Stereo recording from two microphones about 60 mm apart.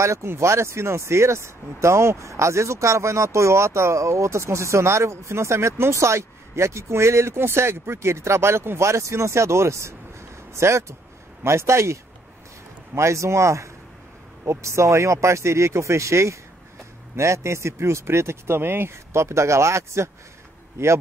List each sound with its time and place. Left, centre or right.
0.0 s speech: right